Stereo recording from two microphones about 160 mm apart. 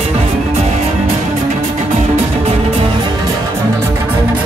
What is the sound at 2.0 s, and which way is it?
Music, 40° right (ahead or behind).